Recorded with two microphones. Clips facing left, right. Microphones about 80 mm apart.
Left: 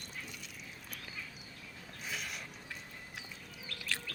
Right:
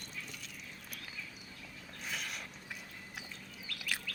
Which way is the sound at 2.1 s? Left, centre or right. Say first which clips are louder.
Even; centre.